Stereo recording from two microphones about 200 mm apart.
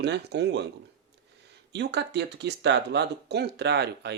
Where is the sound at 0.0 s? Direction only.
60° right (ahead or behind).